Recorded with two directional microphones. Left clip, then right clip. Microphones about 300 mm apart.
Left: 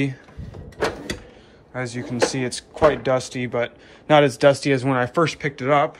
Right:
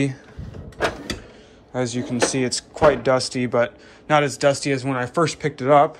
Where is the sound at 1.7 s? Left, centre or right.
Centre.